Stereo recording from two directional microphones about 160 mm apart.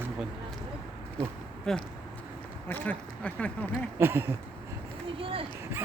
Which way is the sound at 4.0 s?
15° right (ahead or behind).